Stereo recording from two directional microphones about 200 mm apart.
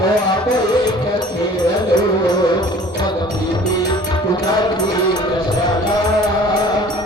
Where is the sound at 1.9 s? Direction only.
20° left (ahead or behind).